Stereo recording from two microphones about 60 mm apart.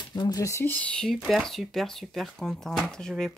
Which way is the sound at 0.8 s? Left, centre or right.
Centre.